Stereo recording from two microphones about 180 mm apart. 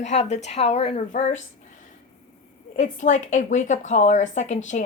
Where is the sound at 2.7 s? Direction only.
45° left (ahead or behind).